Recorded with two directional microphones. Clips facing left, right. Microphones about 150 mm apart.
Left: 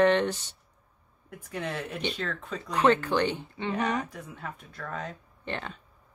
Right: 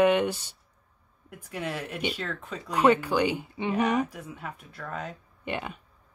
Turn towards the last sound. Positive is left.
turn(degrees=-10)  # may be behind; listen again after turning